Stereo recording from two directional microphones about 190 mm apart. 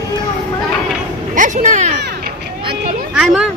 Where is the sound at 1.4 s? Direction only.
40° right (ahead or behind).